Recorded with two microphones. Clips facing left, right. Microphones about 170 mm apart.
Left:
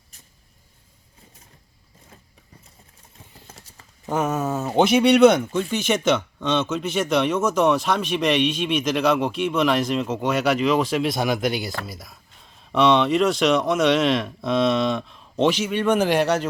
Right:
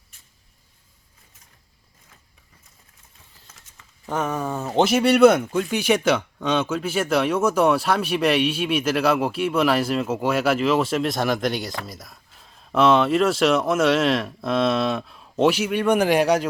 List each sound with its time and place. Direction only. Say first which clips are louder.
3.4 s clip-clop: left 4 dB; 35° left (ahead or behind)
4.0 s speech: left 2 dB; 10° left (ahead or behind); by 16.5 s 10° right (ahead or behind)